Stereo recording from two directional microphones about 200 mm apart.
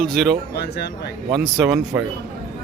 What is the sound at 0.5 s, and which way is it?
Speech, 55° left (ahead or behind).